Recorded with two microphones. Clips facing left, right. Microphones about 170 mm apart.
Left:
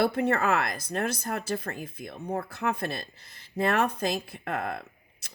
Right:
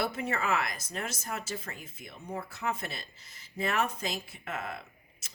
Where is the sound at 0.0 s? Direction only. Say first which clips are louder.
Left 7 dB; 60° left (ahead or behind).